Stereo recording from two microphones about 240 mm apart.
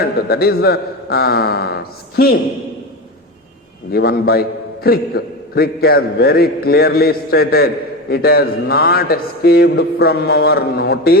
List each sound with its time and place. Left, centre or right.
0.0 s a man's voice: left
3.9 s a man's voice: left